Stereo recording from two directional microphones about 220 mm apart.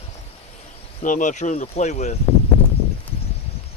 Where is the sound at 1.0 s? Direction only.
35° left (ahead or behind).